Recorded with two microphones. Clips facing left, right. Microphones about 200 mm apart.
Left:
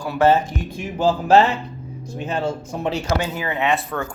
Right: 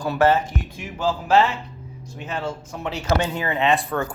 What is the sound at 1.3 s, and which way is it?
Speech, 40° left (ahead or behind).